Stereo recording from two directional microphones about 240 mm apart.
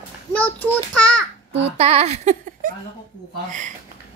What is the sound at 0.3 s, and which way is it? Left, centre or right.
Speech, centre.